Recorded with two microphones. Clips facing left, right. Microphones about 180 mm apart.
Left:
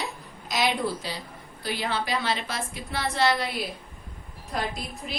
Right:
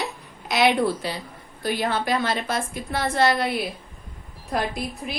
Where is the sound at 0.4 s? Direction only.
65° right (ahead or behind).